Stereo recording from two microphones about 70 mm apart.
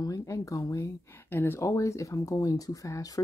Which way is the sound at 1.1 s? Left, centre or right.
Left.